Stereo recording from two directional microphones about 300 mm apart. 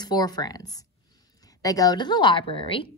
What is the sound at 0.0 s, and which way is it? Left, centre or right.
Speech, centre.